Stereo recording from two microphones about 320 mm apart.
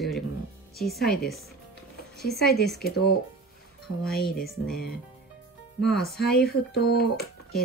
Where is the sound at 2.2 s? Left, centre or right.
Centre.